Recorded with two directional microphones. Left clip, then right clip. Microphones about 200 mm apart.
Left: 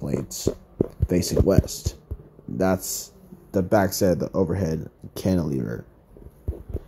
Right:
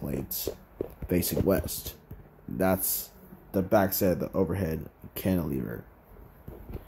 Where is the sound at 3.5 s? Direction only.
15° left (ahead or behind).